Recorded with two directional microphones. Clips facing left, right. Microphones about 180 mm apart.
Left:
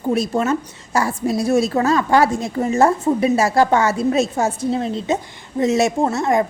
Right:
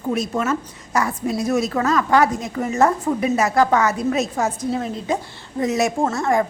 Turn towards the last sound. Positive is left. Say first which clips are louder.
# left 2 dB
turn(degrees=20)  # may be behind; listen again after turning